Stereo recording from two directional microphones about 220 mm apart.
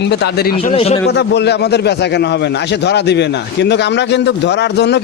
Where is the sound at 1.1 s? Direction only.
50° left (ahead or behind).